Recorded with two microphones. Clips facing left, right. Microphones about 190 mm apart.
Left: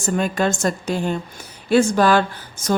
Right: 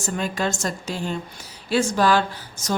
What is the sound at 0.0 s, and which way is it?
A woman's voice, 55° left (ahead or behind).